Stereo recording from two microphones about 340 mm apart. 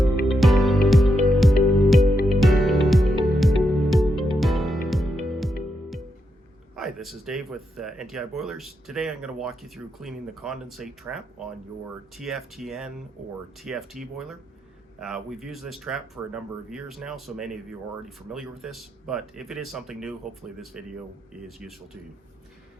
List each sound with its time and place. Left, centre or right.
0.3 s music: centre
6.7 s speech: centre
21.4 s speech: centre